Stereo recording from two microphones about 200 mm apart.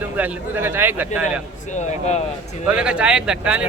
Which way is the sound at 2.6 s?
5° right (ahead or behind).